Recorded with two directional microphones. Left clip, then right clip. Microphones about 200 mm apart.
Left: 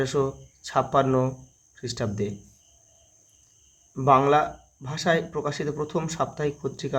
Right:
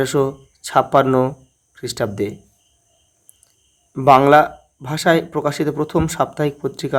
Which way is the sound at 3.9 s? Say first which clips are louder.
Right 9 dB; 45° right (ahead or behind).